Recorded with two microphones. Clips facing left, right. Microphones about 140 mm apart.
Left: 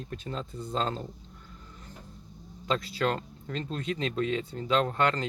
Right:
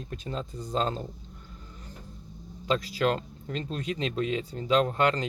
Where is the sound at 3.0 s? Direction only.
20° right (ahead or behind).